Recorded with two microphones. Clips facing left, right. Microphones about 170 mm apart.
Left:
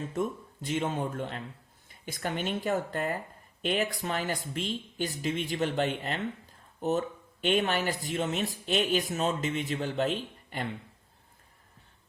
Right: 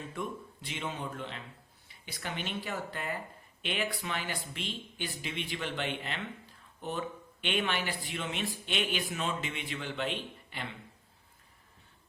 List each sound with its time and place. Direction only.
0.0 s speech: 40° left (ahead or behind)